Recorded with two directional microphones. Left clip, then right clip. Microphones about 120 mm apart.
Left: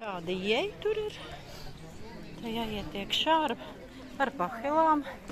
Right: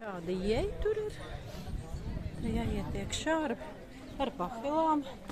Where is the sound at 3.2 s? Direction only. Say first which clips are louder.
Left 6 dB; 30° right (ahead or behind).